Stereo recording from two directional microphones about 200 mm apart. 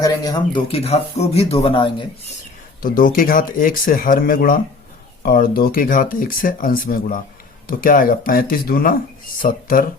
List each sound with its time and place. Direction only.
0.0 s a man's voice: 20° left (ahead or behind)
2.8 s speech: 45° left (ahead or behind)